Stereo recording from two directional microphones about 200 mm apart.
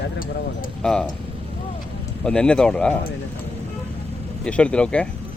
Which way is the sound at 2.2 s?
5° left (ahead or behind).